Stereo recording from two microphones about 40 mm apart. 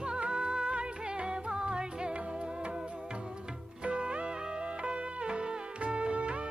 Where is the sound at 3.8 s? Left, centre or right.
Right.